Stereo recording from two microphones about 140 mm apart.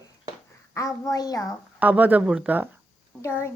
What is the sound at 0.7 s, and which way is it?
Speech, 25° left (ahead or behind).